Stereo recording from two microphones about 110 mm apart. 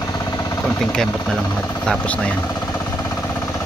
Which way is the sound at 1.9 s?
10° left (ahead or behind).